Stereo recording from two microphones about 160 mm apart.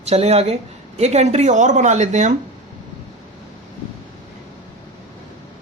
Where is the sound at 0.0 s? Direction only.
40° right (ahead or behind).